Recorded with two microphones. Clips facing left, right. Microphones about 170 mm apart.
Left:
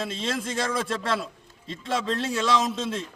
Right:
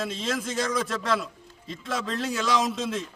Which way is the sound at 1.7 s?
Centre (ahead or behind).